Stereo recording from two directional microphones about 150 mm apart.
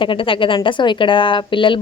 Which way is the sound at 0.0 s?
35° left (ahead or behind).